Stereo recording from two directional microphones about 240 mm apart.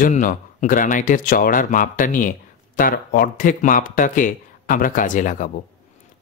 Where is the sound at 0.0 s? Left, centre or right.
Left.